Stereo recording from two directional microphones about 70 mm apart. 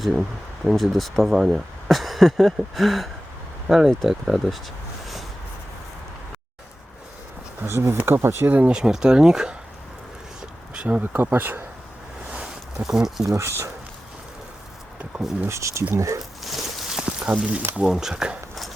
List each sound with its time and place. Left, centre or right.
0.0 s speech: centre
7.6 s speech: right
8.5 s speech: centre
10.8 s a sound: centre
11.0 s speech: right
12.3 s a sound: centre
13.2 s speech: right
15.4 s speech: right
16.4 s a sound: centre
17.7 s speech: centre